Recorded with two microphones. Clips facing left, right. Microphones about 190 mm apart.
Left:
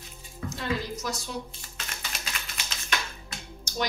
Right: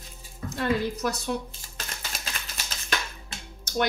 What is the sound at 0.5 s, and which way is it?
Speech, 60° right (ahead or behind).